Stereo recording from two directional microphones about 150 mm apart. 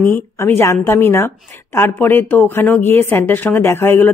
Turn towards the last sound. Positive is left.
turn(degrees=15)  # may be behind; listen again after turning